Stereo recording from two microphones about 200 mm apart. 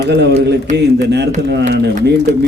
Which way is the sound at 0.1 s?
55° right (ahead or behind).